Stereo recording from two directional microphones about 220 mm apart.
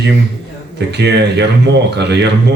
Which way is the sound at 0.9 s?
50° right (ahead or behind).